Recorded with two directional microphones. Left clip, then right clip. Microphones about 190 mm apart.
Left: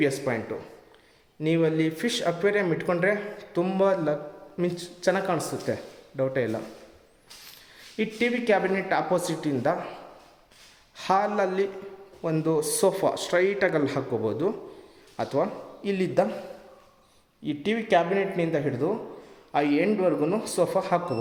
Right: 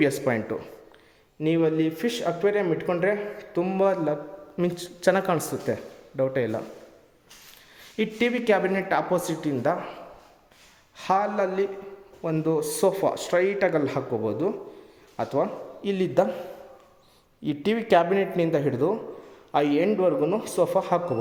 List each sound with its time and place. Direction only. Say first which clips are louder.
0.0 s speech: right 2 dB; 30° right (ahead or behind)
1.4 s a man's voice: right 1 dB; 10° right (ahead or behind)
4.5 s a man's voice: right 1 dB; 15° right (ahead or behind)
7.9 s a man's voice: right 1 dB; 15° right (ahead or behind)
17.4 s a man's voice: right 2 dB; 25° right (ahead or behind); by 21.0 s 10° right (ahead or behind)